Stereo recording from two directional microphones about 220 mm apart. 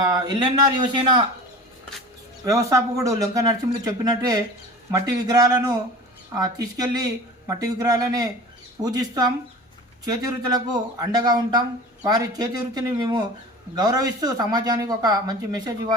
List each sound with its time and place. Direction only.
0.1 s speech: 20° right (ahead or behind)
2.4 s speech: 15° right (ahead or behind)